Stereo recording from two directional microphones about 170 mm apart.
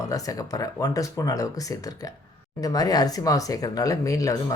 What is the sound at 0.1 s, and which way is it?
Speech, 20° left (ahead or behind).